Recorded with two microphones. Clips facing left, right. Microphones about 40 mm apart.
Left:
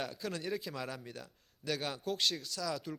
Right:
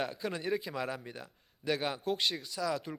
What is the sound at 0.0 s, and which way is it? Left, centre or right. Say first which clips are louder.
A man's voice: right 4 dB; centre.